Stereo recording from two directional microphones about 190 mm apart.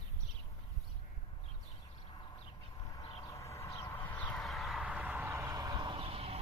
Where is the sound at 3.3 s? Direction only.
15° left (ahead or behind).